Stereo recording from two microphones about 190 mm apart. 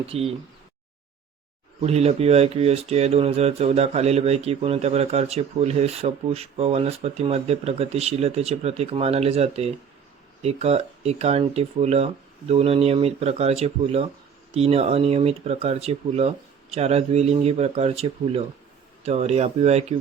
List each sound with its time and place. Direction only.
0.1 s speech: 30° right (ahead or behind)
1.8 s speech: 35° right (ahead or behind)